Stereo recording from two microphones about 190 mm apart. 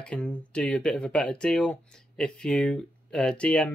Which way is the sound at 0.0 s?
5° left (ahead or behind).